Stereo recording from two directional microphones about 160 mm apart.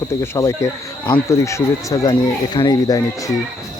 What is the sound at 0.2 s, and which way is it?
Speech, 20° left (ahead or behind).